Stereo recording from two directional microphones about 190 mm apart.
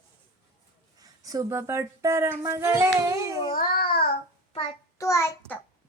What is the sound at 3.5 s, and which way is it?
Babbling, 50° left (ahead or behind).